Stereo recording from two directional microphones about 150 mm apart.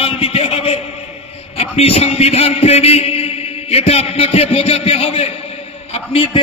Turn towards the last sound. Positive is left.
turn(degrees=40)  # may be behind; listen again after turning